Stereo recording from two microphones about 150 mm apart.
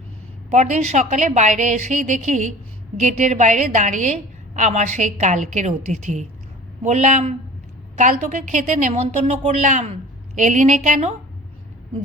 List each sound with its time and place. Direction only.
0.5 s a woman's voice: 50° right (ahead or behind)